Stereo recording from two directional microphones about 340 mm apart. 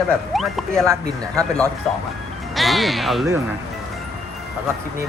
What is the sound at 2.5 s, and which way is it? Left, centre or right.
Speech, centre.